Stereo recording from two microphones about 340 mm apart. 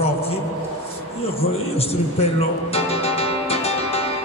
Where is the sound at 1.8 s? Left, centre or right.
Centre.